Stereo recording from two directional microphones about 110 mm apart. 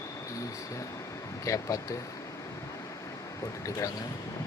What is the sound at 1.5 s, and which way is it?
Speech, 30° left (ahead or behind).